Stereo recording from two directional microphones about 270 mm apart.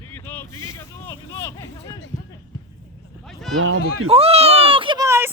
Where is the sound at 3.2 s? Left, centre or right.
Centre.